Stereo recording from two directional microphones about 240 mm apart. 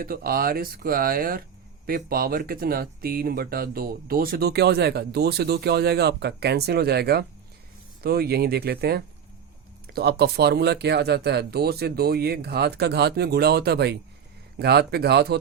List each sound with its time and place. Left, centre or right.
0.0 s speech: right